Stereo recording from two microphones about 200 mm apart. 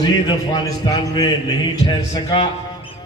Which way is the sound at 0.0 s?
20° left (ahead or behind).